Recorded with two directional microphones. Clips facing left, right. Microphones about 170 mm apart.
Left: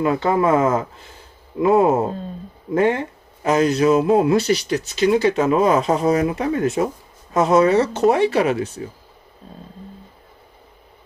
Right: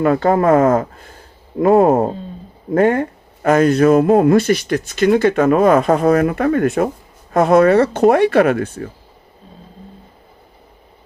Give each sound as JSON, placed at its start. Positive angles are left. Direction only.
{"t": 0.0, "sound": "speech", "side_deg": -55}